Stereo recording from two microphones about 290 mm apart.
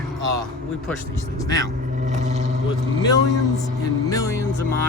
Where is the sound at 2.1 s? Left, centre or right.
Right.